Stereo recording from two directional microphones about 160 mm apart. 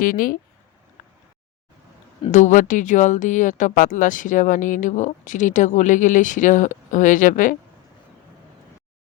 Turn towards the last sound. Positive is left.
turn(degrees=55)  # may be behind; listen again after turning